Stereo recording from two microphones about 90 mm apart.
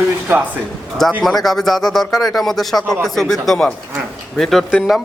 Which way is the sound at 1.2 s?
Centre (ahead or behind).